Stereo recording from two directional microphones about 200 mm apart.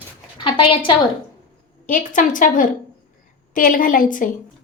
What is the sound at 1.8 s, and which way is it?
A woman's voice, 40° left (ahead or behind).